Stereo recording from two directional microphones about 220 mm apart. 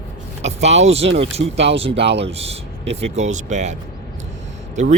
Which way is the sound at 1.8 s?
25° right (ahead or behind).